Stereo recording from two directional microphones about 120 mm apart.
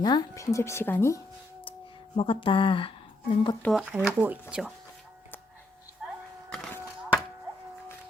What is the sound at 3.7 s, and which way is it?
Speech, 5° right (ahead or behind).